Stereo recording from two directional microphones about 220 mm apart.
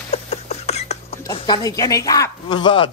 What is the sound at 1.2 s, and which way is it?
Speech, 20° left (ahead or behind).